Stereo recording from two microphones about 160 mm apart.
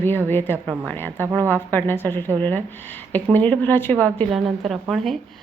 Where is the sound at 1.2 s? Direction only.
20° right (ahead or behind).